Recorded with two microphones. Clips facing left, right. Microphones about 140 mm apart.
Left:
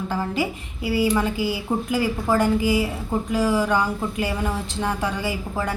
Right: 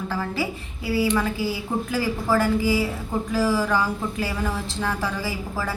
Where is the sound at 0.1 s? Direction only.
20° left (ahead or behind).